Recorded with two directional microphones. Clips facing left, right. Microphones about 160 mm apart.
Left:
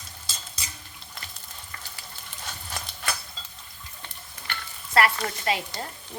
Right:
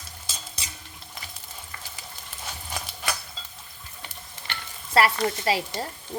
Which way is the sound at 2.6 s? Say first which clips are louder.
Right 2 dB; 10° right (ahead or behind).